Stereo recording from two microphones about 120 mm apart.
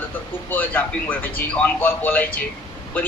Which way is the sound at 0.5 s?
15° left (ahead or behind).